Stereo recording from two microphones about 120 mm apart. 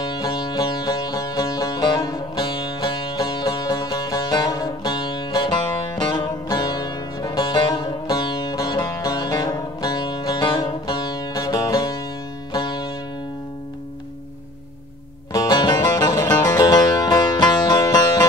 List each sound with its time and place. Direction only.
0.0 s music: 35° left (ahead or behind)
15.3 s music: 35° left (ahead or behind)